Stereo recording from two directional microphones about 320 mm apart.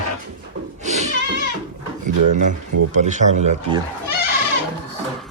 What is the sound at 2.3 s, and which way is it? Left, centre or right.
Speech, right.